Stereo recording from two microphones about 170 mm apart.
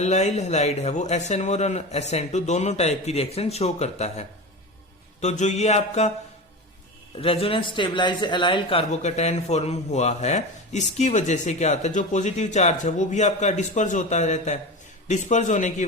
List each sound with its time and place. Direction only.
0.0 s speech: 40° left (ahead or behind)
7.2 s a man's voice: 35° left (ahead or behind)